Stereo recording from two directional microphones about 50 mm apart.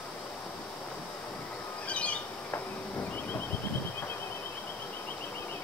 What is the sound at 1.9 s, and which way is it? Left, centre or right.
Squawk, left.